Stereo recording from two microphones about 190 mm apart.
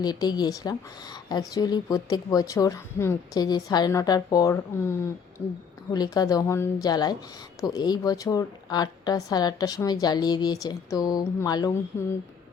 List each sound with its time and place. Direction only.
0.0 s speech: 20° left (ahead or behind)